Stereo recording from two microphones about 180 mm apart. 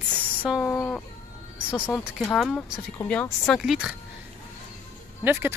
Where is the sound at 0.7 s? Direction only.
10° left (ahead or behind).